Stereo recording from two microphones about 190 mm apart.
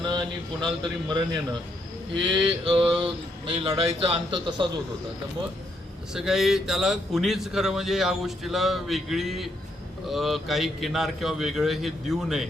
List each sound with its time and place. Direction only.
0.0 s a sound: 25° right (ahead or behind)
0.8 s speech: 25° right (ahead or behind)
6.1 s speech: centre (ahead or behind)